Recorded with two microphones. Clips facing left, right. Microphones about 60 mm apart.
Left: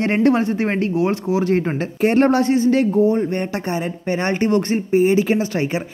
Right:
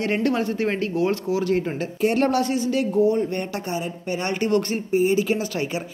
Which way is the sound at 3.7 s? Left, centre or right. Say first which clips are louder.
Left 5 dB; left.